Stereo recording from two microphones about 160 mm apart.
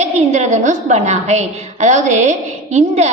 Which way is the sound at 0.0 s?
45° right (ahead or behind).